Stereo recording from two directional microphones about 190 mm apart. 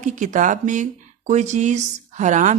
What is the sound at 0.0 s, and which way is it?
A woman's voice, 40° right (ahead or behind).